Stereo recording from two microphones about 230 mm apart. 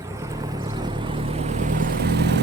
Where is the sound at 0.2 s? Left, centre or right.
Centre.